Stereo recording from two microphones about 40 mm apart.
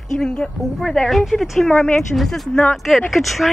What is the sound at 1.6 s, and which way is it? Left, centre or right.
Speech, centre.